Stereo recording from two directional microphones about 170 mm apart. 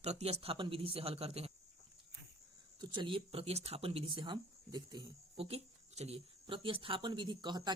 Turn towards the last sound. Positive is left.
turn(degrees=-25)  # may be behind; listen again after turning